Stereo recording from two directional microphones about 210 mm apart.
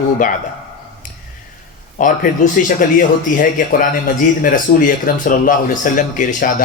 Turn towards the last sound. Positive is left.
turn(degrees=40)  # may be behind; listen again after turning